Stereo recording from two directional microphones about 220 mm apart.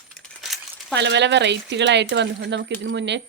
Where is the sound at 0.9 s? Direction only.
50° right (ahead or behind).